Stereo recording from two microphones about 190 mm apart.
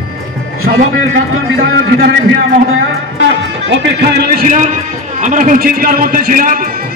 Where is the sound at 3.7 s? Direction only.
65° right (ahead or behind); by 6.5 s 45° right (ahead or behind).